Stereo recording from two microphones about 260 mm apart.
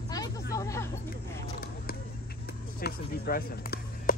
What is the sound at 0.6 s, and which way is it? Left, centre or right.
Hubbub, centre.